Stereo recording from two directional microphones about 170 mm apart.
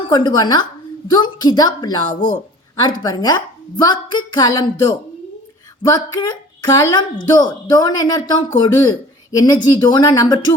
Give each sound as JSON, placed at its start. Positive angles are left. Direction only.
{"t": 0.1, "sound": "a woman's voice", "side_deg": 25}